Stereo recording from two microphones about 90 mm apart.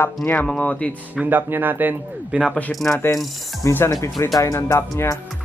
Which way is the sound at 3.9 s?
40° left (ahead or behind).